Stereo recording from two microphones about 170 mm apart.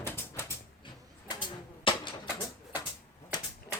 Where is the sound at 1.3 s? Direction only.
25° left (ahead or behind).